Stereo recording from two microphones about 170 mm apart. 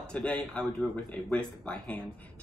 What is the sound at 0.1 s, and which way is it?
Speech, 5° left (ahead or behind).